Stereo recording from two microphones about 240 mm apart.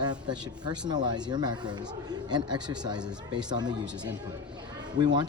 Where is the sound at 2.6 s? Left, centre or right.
Centre.